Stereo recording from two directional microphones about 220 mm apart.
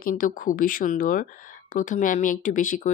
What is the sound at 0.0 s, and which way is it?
Speech, 40° left (ahead or behind).